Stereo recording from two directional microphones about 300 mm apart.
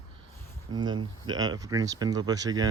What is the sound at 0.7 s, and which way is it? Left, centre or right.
Speech, centre.